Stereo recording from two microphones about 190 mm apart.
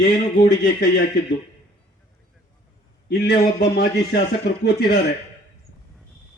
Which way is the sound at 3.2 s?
60° left (ahead or behind).